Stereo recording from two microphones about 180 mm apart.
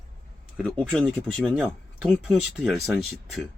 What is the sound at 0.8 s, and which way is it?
Speech, 5° left (ahead or behind).